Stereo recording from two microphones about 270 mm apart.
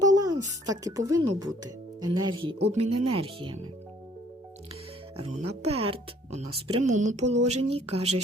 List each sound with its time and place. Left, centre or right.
0.0 s speech: centre
5.1 s speech: right